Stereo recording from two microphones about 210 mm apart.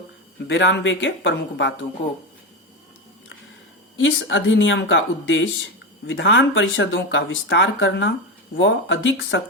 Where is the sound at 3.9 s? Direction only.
65° left (ahead or behind).